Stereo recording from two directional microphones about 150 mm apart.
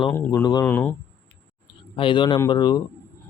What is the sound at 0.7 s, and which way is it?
Speech, 10° left (ahead or behind).